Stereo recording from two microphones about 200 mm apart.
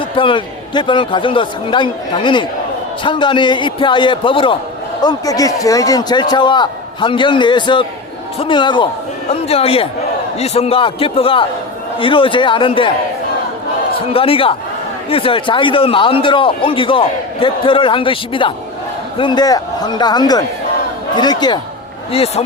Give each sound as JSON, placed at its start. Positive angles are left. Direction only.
{"t": 0.2, "sound": "a man's voice", "side_deg": 25}
{"t": 14.1, "sound": "a man's voice", "side_deg": 25}